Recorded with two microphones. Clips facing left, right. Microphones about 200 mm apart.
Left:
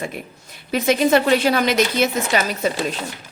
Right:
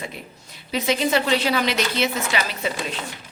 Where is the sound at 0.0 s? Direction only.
50° left (ahead or behind).